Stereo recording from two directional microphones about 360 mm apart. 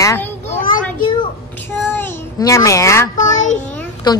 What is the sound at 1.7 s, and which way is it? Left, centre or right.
Child singing, centre.